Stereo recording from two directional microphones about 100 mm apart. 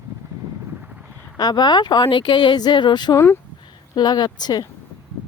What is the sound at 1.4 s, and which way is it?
Speech, 45° left (ahead or behind).